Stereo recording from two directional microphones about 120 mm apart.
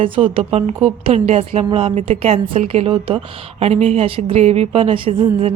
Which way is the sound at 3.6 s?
65° right (ahead or behind).